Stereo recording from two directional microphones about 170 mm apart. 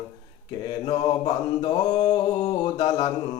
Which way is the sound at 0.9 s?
20° left (ahead or behind).